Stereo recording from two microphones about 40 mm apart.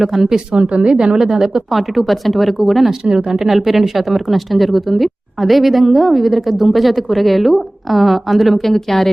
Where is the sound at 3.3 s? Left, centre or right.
Centre.